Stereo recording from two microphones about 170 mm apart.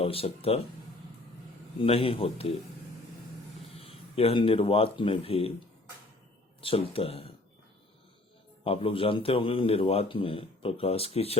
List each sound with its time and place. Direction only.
0.0 s a man's voice: 35° left (ahead or behind)
1.8 s a man's voice: 35° left (ahead or behind)
3.8 s speech: 35° left (ahead or behind)
6.6 s a man's voice: 30° left (ahead or behind)
8.6 s a man's voice: 35° left (ahead or behind)